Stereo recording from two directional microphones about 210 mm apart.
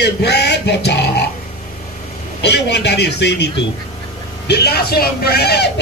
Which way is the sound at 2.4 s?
55° left (ahead or behind).